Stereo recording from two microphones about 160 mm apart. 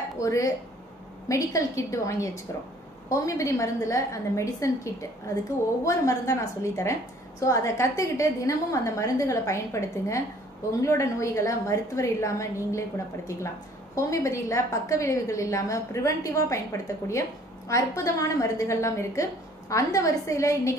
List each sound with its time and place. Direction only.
0.2 s a woman's voice: 20° left (ahead or behind)
13.9 s a woman's voice: 20° left (ahead or behind)